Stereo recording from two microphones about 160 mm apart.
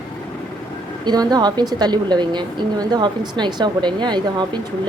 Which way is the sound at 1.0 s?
25° right (ahead or behind).